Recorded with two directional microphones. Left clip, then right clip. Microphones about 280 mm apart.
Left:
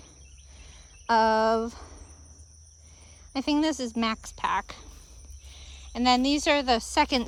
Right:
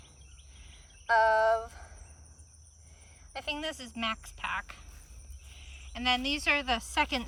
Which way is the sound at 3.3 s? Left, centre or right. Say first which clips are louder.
Left 9 dB; centre.